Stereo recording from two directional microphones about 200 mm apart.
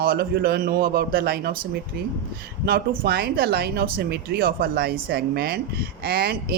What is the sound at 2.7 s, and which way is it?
Speech, 50° right (ahead or behind).